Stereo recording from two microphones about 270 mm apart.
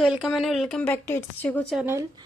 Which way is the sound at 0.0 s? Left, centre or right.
Centre.